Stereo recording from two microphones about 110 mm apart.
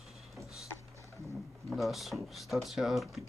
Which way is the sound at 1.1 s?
30° left (ahead or behind).